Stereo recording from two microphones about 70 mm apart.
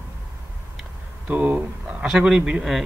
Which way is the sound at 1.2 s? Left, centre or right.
Right.